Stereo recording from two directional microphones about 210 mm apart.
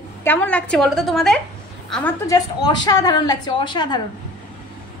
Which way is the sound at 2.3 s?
20° left (ahead or behind).